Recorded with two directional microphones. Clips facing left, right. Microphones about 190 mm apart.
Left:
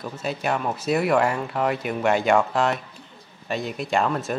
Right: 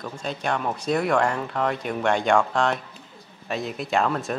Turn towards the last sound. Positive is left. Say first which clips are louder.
# even
turn(degrees=0)  # may be behind; listen again after turning